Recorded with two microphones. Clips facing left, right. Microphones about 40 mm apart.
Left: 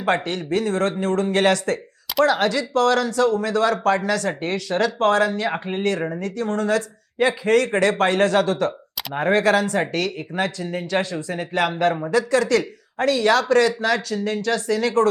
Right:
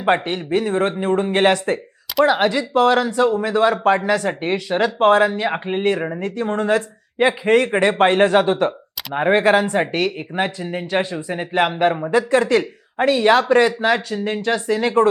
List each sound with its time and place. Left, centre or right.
0.0 s speech: right